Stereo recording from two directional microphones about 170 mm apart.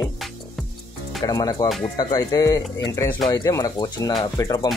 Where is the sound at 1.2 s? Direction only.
20° left (ahead or behind).